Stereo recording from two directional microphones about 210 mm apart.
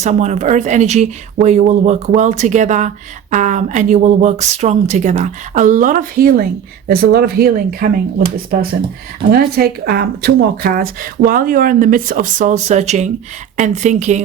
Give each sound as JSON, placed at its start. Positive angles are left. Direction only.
{"t": 0.0, "sound": "speech", "side_deg": -35}
{"t": 9.3, "sound": "speech", "side_deg": -45}